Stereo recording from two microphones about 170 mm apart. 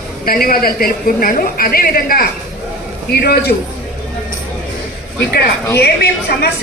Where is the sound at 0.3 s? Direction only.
60° left (ahead or behind).